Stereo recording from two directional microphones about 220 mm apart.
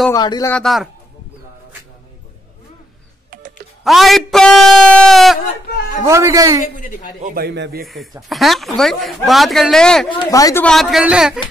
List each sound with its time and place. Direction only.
0.1 s speech: 15° left (ahead or behind)
0.5 s speech: centre (ahead or behind)
3.8 s speech: centre (ahead or behind)
6.0 s a man's voice: 15° right (ahead or behind)
6.6 s a woman's voice: 35° left (ahead or behind)
7.2 s speech: 45° right (ahead or behind)
7.8 s speech: centre (ahead or behind)
10.0 s speech: 20° left (ahead or behind); by 11.3 s 5° right (ahead or behind)